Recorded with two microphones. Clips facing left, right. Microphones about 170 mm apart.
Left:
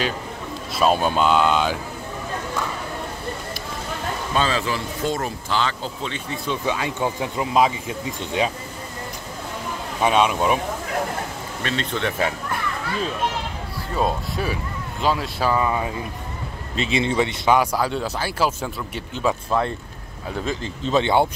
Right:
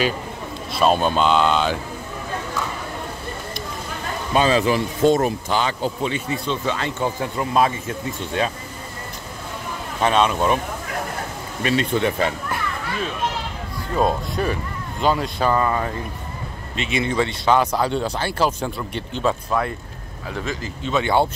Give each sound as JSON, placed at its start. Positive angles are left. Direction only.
{"t": 0.7, "sound": "speech", "side_deg": 5}
{"t": 4.3, "sound": "speech", "side_deg": -15}
{"t": 6.3, "sound": "speech", "side_deg": 10}
{"t": 9.9, "sound": "speech", "side_deg": 10}
{"t": 11.6, "sound": "speech", "side_deg": -10}
{"t": 13.9, "sound": "speech", "side_deg": 0}
{"t": 16.7, "sound": "speech", "side_deg": 30}
{"t": 17.1, "sound": "speech", "side_deg": 15}
{"t": 17.7, "sound": "speech", "side_deg": 5}
{"t": 19.6, "sound": "speech", "side_deg": 25}